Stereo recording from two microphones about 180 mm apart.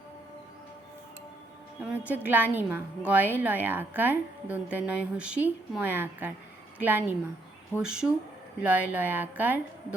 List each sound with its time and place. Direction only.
1.8 s a woman's voice: 10° right (ahead or behind)